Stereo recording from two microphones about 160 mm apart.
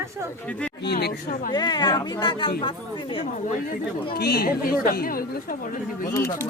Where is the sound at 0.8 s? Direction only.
90° left.